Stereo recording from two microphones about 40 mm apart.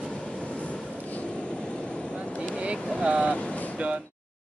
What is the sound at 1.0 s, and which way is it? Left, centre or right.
Vehicle, left.